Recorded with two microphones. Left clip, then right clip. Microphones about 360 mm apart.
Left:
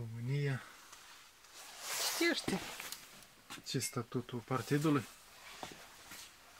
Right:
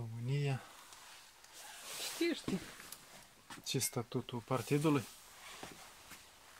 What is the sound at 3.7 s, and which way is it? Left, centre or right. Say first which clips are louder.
Speech: even; centre.